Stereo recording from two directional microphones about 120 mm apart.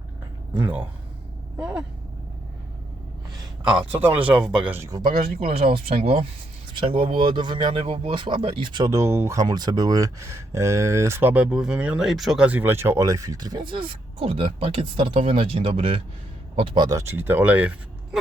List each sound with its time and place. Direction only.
0.5 s speech: 15° right (ahead or behind)
4.0 s speech: 10° right (ahead or behind)
4.8 s speech: 30° right (ahead or behind)
5.0 s speech: 50° right (ahead or behind)
6.7 s speech: 45° right (ahead or behind)
8.9 s speech: 25° right (ahead or behind); by 12.5 s centre (ahead or behind)
12.5 s speech: 15° right (ahead or behind); by 16.9 s 45° right (ahead or behind)
16.9 s speech: 20° right (ahead or behind)